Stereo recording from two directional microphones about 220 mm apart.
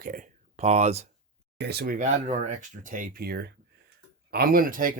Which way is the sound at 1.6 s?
45° right (ahead or behind).